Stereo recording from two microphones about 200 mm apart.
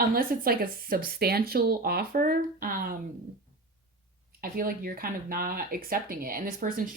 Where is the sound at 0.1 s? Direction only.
45° right (ahead or behind).